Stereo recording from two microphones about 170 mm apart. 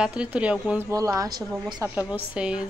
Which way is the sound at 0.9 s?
20° right (ahead or behind).